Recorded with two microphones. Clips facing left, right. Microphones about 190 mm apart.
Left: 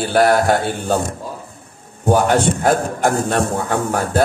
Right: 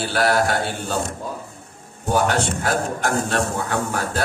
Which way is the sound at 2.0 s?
55° left (ahead or behind).